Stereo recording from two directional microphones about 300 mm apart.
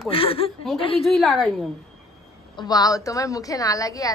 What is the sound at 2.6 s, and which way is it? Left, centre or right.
A woman's voice, centre.